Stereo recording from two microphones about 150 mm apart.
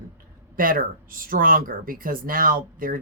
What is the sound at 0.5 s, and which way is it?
Speech, 70° right (ahead or behind).